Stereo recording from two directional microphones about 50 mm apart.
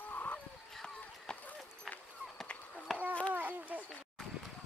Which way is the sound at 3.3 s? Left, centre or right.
Right.